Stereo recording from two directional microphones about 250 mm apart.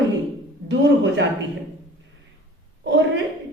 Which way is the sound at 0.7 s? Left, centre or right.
Right.